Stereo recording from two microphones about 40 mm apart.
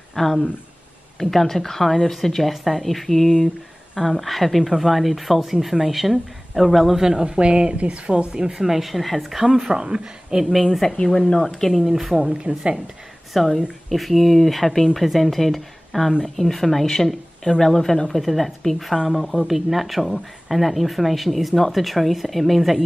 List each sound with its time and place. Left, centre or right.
0.1 s speech: centre
3.9 s speech: centre
7.1 s a woman's voice: right
8.3 s a woman's voice: centre
8.6 s speech: centre
9.7 s a woman's voice: centre
10.4 s speech: centre
11.1 s speech: left
11.4 s speech: centre
11.8 s speech: centre
12.3 s a woman's voice: right
13.3 s speech: centre